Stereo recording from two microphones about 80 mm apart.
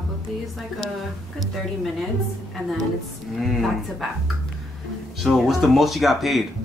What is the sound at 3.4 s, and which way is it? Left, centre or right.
Speech, centre.